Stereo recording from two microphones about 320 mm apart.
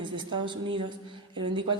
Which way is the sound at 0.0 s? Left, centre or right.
Centre.